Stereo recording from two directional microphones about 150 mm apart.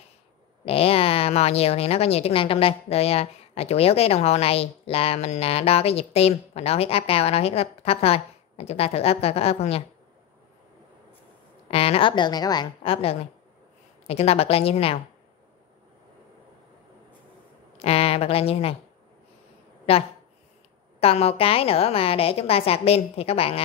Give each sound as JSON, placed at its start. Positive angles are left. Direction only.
{"t": 0.7, "sound": "a woman's voice", "side_deg": 40}
{"t": 11.7, "sound": "a woman's voice", "side_deg": 40}
{"t": 17.7, "sound": "a woman's voice", "side_deg": 40}
{"t": 19.9, "sound": "a woman's voice", "side_deg": 40}